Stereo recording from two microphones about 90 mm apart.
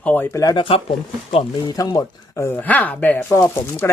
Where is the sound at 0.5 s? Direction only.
85° left.